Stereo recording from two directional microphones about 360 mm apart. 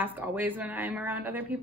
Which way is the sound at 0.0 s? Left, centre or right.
Centre.